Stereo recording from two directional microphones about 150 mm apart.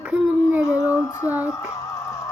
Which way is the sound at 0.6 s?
20° left (ahead or behind).